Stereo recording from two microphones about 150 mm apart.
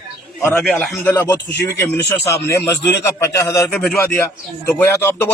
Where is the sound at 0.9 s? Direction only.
15° left (ahead or behind).